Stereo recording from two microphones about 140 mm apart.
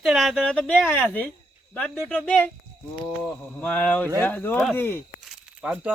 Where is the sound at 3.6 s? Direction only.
10° left (ahead or behind).